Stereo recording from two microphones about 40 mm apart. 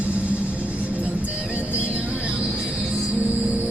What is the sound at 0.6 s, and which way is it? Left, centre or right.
Music, right.